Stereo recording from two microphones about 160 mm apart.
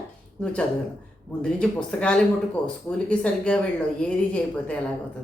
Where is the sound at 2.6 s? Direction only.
30° left (ahead or behind).